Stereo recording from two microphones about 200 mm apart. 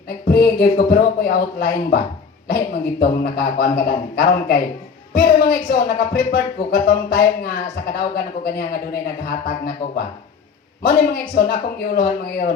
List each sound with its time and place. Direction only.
0.3 s speech: 50° left (ahead or behind)
3.0 s speech: 50° left (ahead or behind)